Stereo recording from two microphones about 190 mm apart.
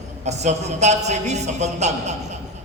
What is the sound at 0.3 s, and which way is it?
A man's voice, 35° right (ahead or behind).